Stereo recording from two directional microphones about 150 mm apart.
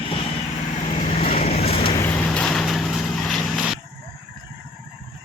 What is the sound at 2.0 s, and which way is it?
Vehicle, 5° left (ahead or behind).